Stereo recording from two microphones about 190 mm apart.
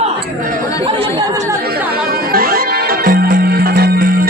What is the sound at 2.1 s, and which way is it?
Music, 50° right (ahead or behind).